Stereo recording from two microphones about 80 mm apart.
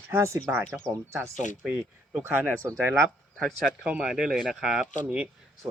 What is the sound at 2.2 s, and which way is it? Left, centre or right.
Speech, right.